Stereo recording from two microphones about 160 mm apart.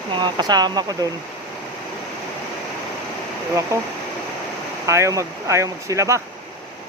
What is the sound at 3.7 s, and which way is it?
Speech, 15° right (ahead or behind).